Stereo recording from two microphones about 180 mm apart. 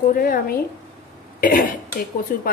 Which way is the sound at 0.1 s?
55° left (ahead or behind).